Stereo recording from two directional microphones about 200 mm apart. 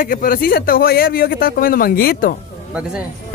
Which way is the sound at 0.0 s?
45° left (ahead or behind).